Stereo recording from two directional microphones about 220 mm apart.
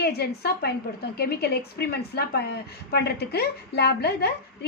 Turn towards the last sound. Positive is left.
turn(degrees=45)  # may be behind; listen again after turning